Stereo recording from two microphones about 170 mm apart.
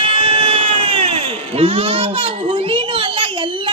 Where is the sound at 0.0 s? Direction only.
30° right (ahead or behind).